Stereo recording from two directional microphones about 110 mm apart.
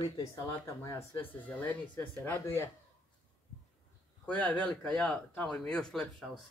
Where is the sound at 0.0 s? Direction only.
30° left (ahead or behind).